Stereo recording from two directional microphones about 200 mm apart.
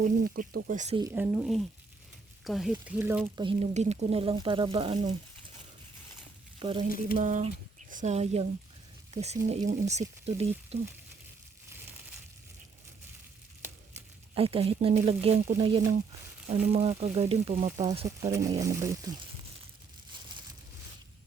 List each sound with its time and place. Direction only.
0.0 s speech: 45° right (ahead or behind)
1.1 s speech: 10° right (ahead or behind)
3.3 s speech: 25° right (ahead or behind)
6.6 s speech: 25° right (ahead or behind)
7.2 s speech: 40° right (ahead or behind)
14.3 s speech: 30° right (ahead or behind)
18.3 s speech: 15° right (ahead or behind)